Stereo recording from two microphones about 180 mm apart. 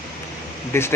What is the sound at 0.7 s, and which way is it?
Speech, 15° left (ahead or behind).